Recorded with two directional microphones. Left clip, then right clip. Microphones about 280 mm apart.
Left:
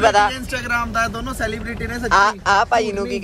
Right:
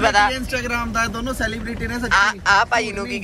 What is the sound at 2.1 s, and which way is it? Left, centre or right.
Speech, centre.